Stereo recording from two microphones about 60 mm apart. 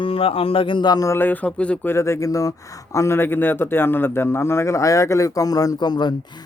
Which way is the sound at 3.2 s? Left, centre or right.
Left.